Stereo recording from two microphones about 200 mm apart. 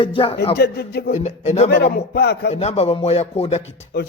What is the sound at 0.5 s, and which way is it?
Speech, 55° left (ahead or behind).